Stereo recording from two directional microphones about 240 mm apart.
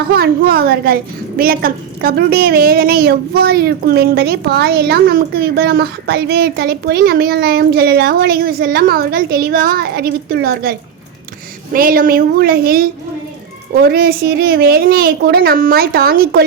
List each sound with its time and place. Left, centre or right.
0.1 s a woman's voice: right